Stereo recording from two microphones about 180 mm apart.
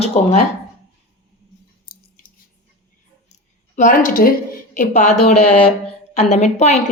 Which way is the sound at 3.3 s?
45° left (ahead or behind).